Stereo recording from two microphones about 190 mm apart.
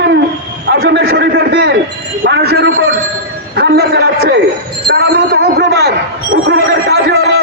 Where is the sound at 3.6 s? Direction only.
60° right (ahead or behind).